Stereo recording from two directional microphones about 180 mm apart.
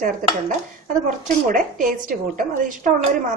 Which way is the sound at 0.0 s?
50° right (ahead or behind).